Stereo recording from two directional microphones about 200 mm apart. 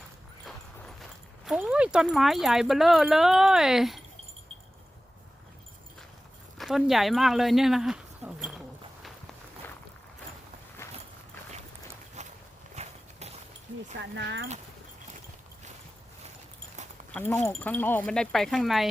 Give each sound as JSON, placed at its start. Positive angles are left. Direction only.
{"t": 1.5, "sound": "speech", "side_deg": -5}
{"t": 6.6, "sound": "speech", "side_deg": 0}
{"t": 12.2, "sound": "walk", "side_deg": -35}
{"t": 14.0, "sound": "speech", "side_deg": -65}
{"t": 17.1, "sound": "speech", "side_deg": 10}